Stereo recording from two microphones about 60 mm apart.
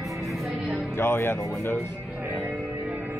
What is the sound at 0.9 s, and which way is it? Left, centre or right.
Speech, left.